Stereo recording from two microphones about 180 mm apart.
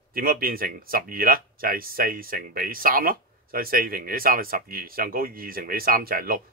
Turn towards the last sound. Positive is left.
turn(degrees=-55)  # may be behind; listen again after turning